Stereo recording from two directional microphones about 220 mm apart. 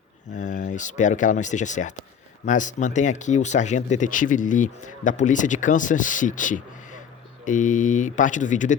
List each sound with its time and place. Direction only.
0.3 s speech: 35° left (ahead or behind)